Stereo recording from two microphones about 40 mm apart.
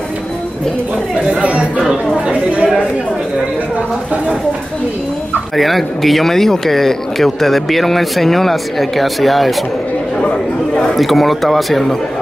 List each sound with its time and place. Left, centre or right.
1.4 s speech: right
2.2 s a sound: right
5.6 s speech: centre
11.0 s speech: centre